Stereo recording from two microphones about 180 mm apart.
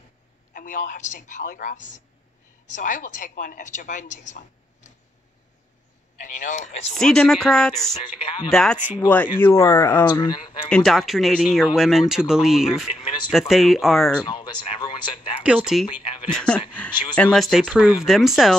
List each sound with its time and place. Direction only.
0.5 s a woman's voice: 50° left (ahead or behind)
6.1 s a woman's voice: 45° left (ahead or behind)
6.9 s speech: 5° left (ahead or behind)
8.2 s speech: 30° left (ahead or behind)
8.5 s speech: 5° left (ahead or behind); by 10.3 s 20° left (ahead or behind)
10.7 s speech: centre (ahead or behind)
14.2 s speech: 25° left (ahead or behind)
15.4 s speech: 5° right (ahead or behind)
16.0 s a sound: 30° left (ahead or behind)
16.3 s speech: 5° left (ahead or behind)